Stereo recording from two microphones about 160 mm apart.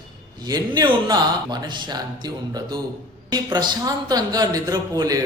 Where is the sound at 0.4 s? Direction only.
25° right (ahead or behind).